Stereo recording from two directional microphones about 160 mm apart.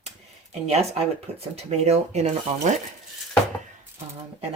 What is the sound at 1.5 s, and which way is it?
Speech, 40° right (ahead or behind).